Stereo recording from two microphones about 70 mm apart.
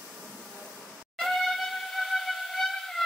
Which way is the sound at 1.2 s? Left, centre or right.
Centre.